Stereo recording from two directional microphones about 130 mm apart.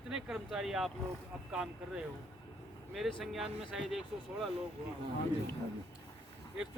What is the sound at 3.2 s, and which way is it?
Speech, centre (ahead or behind).